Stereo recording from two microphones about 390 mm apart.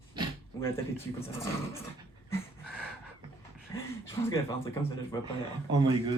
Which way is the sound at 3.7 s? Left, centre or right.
Centre.